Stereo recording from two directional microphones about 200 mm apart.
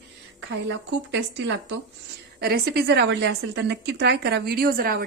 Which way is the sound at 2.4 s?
50° right (ahead or behind).